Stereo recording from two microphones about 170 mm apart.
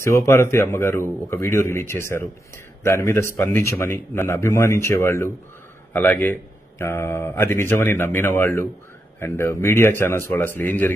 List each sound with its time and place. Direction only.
0.0 s speech: 15° left (ahead or behind)